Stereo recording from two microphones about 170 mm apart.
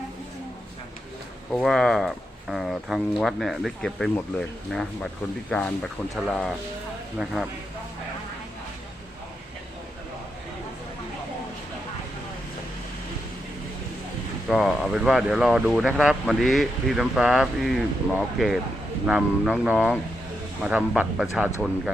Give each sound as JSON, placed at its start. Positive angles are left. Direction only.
{"t": 1.5, "sound": "speech", "side_deg": 0}
{"t": 14.5, "sound": "speech", "side_deg": 0}